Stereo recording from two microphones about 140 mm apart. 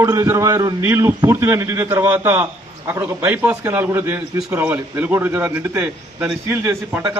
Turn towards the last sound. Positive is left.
turn(degrees=-10)  # may be behind; listen again after turning